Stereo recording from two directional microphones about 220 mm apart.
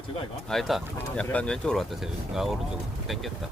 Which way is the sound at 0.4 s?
Centre (ahead or behind).